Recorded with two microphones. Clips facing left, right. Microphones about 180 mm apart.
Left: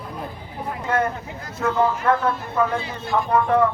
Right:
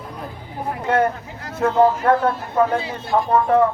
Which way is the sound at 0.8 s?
30° right (ahead or behind).